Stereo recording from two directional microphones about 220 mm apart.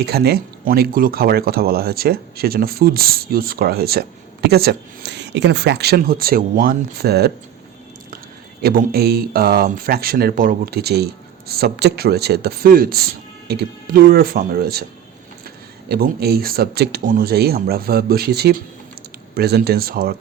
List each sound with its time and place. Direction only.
0.0 s speech: 45° right (ahead or behind)
8.6 s speech: 40° right (ahead or behind)
15.9 s speech: 45° right (ahead or behind)